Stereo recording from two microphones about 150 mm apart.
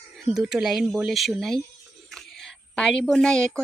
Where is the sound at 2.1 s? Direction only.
Centre (ahead or behind).